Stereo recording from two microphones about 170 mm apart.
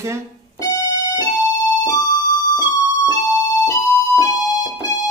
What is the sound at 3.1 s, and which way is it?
Music, 20° left (ahead or behind).